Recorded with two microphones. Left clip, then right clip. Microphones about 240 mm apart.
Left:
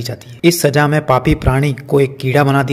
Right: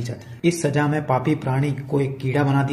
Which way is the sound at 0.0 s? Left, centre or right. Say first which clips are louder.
Left 9 dB; left.